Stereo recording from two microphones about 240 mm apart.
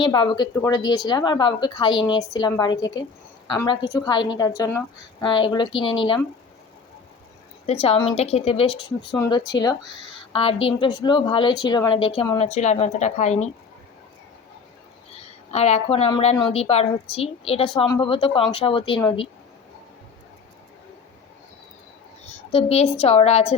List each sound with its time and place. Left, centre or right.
0.0 s a woman's voice: centre
7.7 s a woman's voice: left
15.1 s a woman's voice: left
22.3 s a woman's voice: left